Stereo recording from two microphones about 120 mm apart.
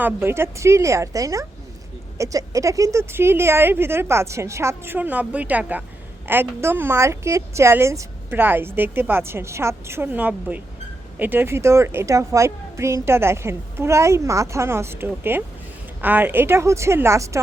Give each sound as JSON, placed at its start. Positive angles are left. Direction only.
{"t": 0.0, "sound": "a woman's voice", "side_deg": -20}